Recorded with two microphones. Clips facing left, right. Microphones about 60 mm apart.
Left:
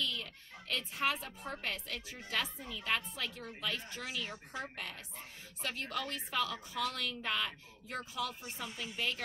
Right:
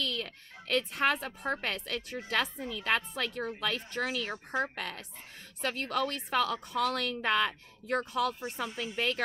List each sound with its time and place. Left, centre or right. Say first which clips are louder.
0.0 s a woman's voice: right 4 dB; right